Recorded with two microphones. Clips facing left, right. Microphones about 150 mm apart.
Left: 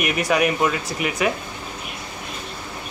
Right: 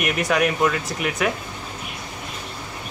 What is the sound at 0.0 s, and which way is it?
Speech, centre (ahead or behind).